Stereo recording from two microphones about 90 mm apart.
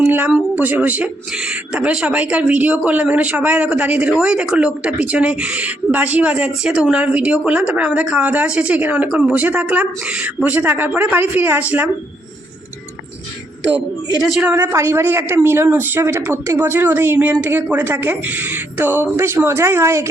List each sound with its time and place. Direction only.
0.0 s a sound: 25° right (ahead or behind)
0.5 s speech: 20° right (ahead or behind)
14.2 s a woman's voice: 5° right (ahead or behind)
14.5 s a woman's voice: 30° right (ahead or behind)